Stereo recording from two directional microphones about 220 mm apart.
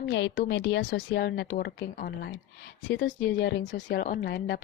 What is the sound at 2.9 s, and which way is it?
Speech, 55° left (ahead or behind).